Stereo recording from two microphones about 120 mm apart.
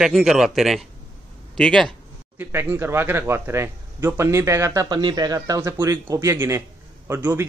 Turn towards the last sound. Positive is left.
turn(degrees=-20)  # may be behind; listen again after turning